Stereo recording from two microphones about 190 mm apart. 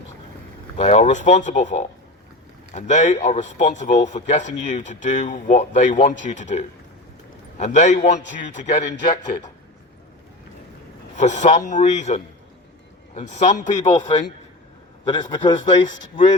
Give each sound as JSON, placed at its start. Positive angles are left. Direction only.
{"t": 0.8, "sound": "speech", "side_deg": 35}
{"t": 11.2, "sound": "speech", "side_deg": 40}
{"t": 13.7, "sound": "speech", "side_deg": 25}